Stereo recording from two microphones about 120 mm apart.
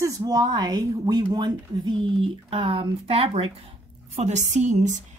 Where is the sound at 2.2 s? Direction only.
50° right (ahead or behind).